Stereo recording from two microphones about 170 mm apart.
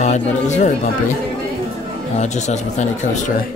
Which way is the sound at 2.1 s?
40° left (ahead or behind).